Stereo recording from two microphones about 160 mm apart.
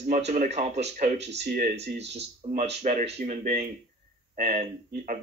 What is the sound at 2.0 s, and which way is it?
Speech, 90° right.